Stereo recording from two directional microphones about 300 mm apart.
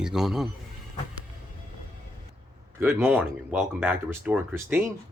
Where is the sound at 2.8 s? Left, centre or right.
Centre.